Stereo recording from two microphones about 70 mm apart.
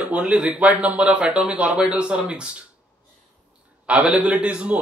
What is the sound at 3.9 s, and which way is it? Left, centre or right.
Speech, centre.